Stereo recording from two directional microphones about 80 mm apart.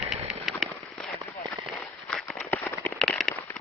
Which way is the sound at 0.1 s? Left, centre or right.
Centre.